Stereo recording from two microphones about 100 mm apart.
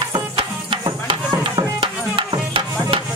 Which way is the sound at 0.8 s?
50° right (ahead or behind).